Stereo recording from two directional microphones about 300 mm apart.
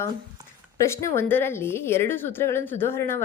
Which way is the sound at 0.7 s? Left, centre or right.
Centre.